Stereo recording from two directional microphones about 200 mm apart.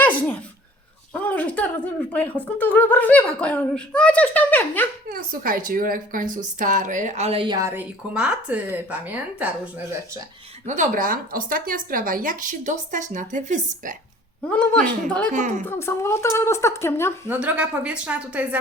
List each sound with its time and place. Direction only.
0.0 s a sound: 10° left (ahead or behind)
1.1 s speech: 10° left (ahead or behind)
5.0 s a woman's voice: 45° right (ahead or behind); by 9.5 s 10° right (ahead or behind)
10.7 s a woman's voice: 40° right (ahead or behind)
14.4 s a woman's voice: 5° left (ahead or behind)
15.3 s a woman's voice: 40° right (ahead or behind)
15.6 s speech: 10° left (ahead or behind)
17.2 s a woman's voice: 10° right (ahead or behind)